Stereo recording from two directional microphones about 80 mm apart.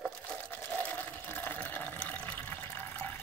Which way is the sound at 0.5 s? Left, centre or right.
Left.